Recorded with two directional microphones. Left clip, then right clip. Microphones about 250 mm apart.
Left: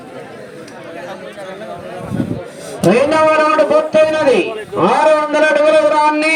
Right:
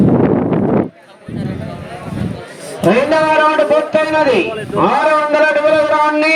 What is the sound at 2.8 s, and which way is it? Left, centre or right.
A man's voice, left.